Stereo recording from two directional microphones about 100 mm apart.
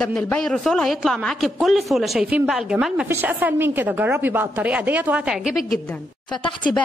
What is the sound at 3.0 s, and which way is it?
A woman's voice, 20° right (ahead or behind).